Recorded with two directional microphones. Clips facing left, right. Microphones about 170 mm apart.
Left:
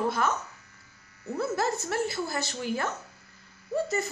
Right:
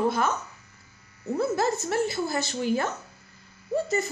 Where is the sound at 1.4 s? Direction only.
20° right (ahead or behind).